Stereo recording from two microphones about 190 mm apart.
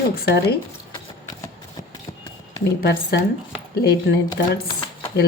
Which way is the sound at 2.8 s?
60° left (ahead or behind).